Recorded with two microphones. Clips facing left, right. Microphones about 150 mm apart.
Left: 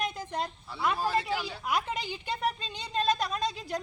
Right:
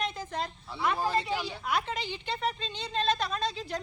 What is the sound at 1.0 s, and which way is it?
Speech, 15° right (ahead or behind).